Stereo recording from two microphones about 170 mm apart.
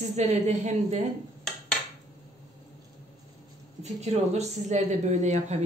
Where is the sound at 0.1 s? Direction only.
40° right (ahead or behind).